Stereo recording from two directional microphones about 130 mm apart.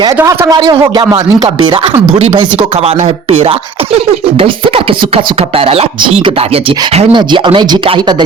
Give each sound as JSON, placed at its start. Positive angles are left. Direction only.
{"t": 0.3, "sound": "speech", "side_deg": -30}
{"t": 3.2, "sound": "speech", "side_deg": -50}
{"t": 7.1, "sound": "speech", "side_deg": -35}